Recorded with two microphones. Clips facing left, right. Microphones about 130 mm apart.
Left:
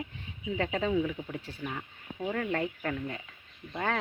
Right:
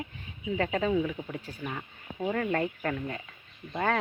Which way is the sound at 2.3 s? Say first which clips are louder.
Right 2 dB; 10° left (ahead or behind).